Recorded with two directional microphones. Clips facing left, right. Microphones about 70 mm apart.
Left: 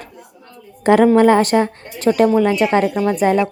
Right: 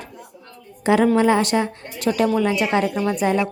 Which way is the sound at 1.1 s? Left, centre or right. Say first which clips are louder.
Left 5 dB; left.